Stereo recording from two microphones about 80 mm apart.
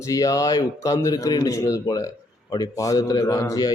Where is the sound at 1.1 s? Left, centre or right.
Left.